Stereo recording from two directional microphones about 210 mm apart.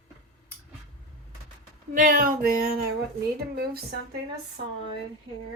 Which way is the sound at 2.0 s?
40° right (ahead or behind).